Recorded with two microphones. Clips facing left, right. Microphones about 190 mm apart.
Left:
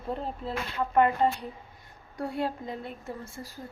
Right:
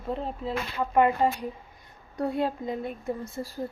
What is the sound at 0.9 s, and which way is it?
Speech, 10° right (ahead or behind).